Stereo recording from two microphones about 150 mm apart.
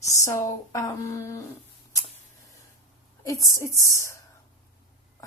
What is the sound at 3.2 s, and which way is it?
Speech, 20° left (ahead or behind).